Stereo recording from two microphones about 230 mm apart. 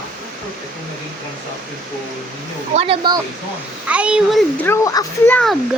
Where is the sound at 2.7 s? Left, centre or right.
Right.